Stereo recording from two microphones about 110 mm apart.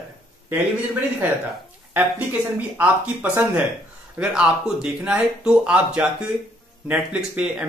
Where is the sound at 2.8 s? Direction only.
15° right (ahead or behind).